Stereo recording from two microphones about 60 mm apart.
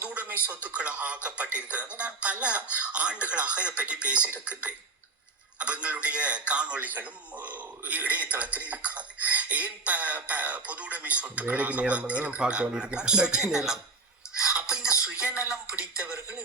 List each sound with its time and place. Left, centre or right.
0.1 s a sound: right
0.4 s a man's voice: right
14.5 s music: centre
15.6 s speech: right